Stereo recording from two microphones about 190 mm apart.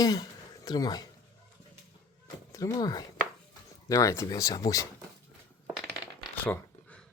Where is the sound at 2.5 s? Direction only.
15° left (ahead or behind).